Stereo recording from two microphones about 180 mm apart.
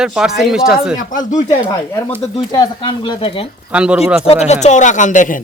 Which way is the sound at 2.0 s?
25° left (ahead or behind).